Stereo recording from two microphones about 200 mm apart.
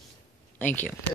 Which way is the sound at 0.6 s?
10° left (ahead or behind).